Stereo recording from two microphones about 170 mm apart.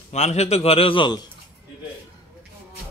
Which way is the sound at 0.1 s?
40° left (ahead or behind).